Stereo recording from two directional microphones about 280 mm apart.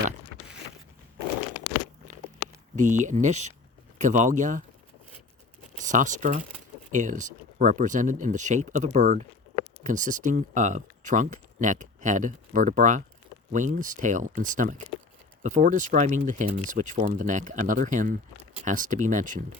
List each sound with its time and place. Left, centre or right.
2.7 s speech: right
5.7 s speech: right